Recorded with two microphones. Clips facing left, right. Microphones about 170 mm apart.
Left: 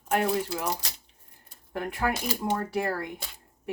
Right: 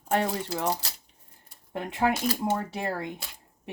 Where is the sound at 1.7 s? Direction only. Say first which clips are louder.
Right 2 dB; 20° right (ahead or behind).